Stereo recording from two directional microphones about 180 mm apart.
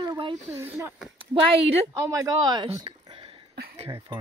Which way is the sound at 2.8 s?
30° right (ahead or behind).